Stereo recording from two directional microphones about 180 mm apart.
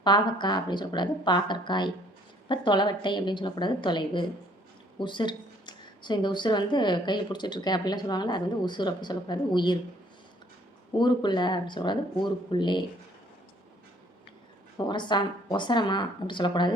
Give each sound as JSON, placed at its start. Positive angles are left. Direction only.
{"t": 0.0, "sound": "speech", "side_deg": 25}
{"t": 10.9, "sound": "speech", "side_deg": 25}
{"t": 14.8, "sound": "speech", "side_deg": 25}